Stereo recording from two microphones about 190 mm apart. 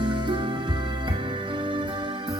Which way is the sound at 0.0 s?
25° right (ahead or behind).